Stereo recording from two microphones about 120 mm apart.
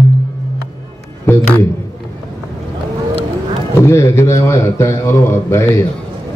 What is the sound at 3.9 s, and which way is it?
Speech, 25° left (ahead or behind).